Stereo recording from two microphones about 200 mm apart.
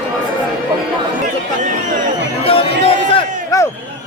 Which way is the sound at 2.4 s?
30° left (ahead or behind).